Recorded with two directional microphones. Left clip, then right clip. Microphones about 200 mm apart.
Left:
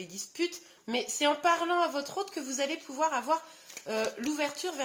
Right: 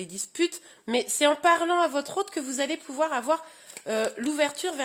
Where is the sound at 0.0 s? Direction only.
55° right (ahead or behind).